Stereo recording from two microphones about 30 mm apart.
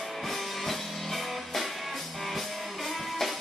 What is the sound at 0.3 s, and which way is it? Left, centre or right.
Music, centre.